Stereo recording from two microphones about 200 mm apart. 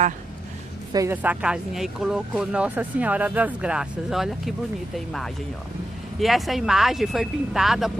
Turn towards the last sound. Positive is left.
turn(degrees=0)  # may be behind; listen again after turning